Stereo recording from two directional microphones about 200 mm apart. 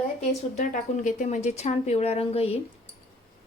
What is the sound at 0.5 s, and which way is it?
Speech, 40° left (ahead or behind).